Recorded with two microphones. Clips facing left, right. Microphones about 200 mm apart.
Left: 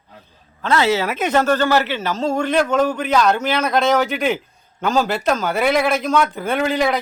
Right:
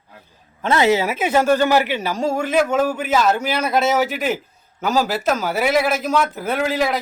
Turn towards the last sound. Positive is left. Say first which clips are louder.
# left 1 dB
turn(degrees=0)  # may be behind; listen again after turning